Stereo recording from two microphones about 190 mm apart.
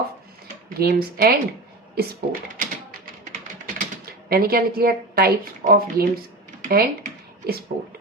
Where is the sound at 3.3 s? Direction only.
50° right (ahead or behind).